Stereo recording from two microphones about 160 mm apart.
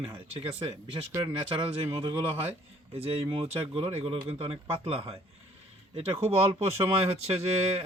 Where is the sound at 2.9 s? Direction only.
35° right (ahead or behind).